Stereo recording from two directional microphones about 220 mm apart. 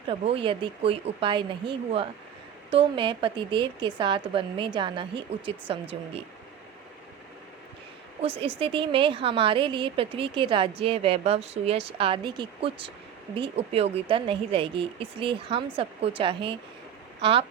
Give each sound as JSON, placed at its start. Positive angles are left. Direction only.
{"t": 0.1, "sound": "speech", "side_deg": -25}
{"t": 8.2, "sound": "speech", "side_deg": -25}